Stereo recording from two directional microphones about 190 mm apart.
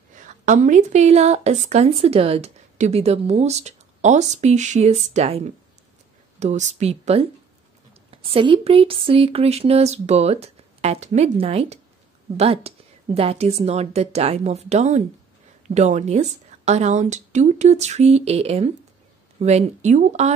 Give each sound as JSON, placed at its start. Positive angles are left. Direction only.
{"t": 0.1, "sound": "a woman's voice", "side_deg": -40}